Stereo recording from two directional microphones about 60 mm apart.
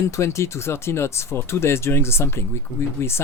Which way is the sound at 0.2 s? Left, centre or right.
Left.